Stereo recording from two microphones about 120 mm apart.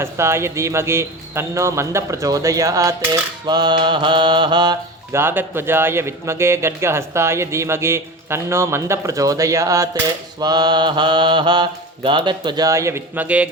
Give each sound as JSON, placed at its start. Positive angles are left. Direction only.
{"t": 0.0, "sound": "a man's voice", "side_deg": -20}
{"t": 3.4, "sound": "mantra", "side_deg": -40}
{"t": 5.1, "sound": "a man's voice", "side_deg": -20}
{"t": 10.4, "sound": "mantra", "side_deg": -35}